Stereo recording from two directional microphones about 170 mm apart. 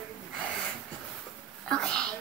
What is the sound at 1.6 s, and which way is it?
Speech, 5° left (ahead or behind).